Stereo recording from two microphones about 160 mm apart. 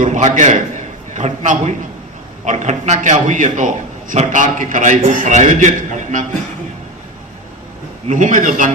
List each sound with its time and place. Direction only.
0.0 s a man's voice: 50° right (ahead or behind)
8.0 s a man's voice: 50° right (ahead or behind)